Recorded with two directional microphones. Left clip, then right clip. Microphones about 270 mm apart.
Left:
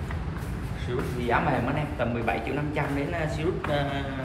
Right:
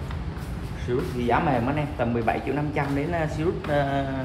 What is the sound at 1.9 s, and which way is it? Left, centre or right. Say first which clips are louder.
Speech: right 3 dB; centre.